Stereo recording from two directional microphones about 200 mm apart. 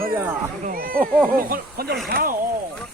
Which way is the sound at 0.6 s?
45° right (ahead or behind).